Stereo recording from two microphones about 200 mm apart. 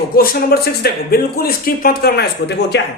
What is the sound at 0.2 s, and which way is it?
A woman's voice, 50° left (ahead or behind).